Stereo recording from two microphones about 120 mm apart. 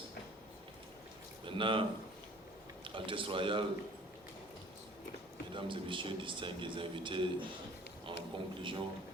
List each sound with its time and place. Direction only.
1.5 s speech: 45° right (ahead or behind)
2.8 s a man's voice: 45° right (ahead or behind)
5.5 s a man's voice: 45° right (ahead or behind)
8.0 s a sound: 45° right (ahead or behind)